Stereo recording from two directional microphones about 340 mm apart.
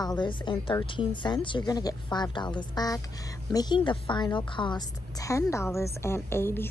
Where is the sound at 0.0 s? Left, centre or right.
Centre.